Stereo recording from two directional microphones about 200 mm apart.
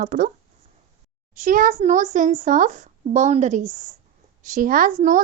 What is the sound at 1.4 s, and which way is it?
A child's voice, 40° right (ahead or behind).